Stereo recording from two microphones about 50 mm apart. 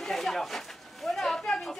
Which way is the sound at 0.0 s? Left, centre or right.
Centre.